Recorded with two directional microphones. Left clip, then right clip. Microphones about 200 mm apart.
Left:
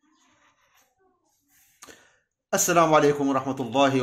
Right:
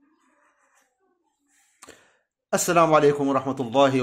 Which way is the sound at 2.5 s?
25° right (ahead or behind).